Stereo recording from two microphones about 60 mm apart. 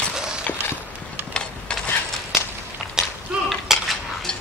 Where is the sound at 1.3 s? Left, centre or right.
Centre.